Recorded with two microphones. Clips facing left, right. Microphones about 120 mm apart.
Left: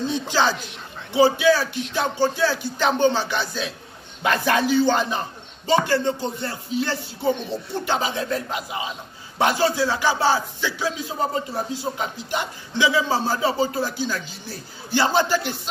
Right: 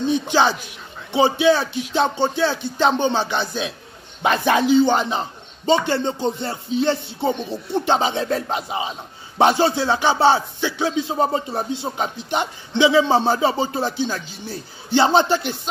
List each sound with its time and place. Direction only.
0.1 s speech: 20° right (ahead or behind)